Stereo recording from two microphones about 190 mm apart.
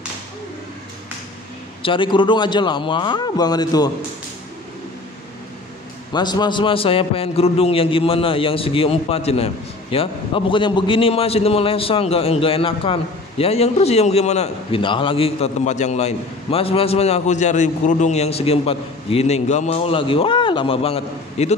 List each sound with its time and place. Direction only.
1.8 s a man's voice: 25° left (ahead or behind)
6.1 s a man's voice: 25° left (ahead or behind)